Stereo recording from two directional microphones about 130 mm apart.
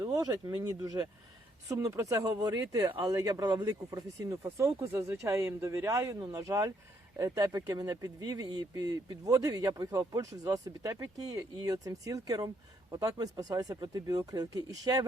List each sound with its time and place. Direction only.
0.0 s speech: 25° right (ahead or behind)